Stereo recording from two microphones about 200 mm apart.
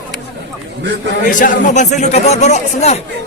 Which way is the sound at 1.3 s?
40° left (ahead or behind).